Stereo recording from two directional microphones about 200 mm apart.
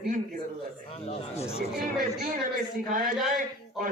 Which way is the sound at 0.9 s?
30° left (ahead or behind).